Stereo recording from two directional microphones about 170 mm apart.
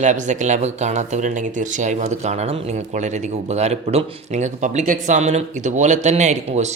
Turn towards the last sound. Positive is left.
turn(degrees=-40)  # may be behind; listen again after turning